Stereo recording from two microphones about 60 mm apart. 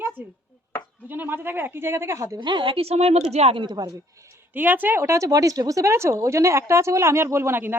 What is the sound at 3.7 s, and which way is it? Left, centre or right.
Speech, right.